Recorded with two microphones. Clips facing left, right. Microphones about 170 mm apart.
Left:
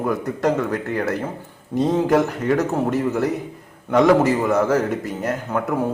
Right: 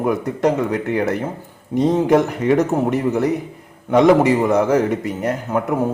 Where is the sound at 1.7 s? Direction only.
20° right (ahead or behind).